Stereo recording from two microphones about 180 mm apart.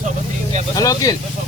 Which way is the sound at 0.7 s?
20° left (ahead or behind).